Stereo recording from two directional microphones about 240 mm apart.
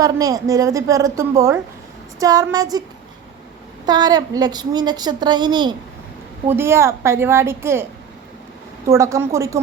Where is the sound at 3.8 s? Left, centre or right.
Centre.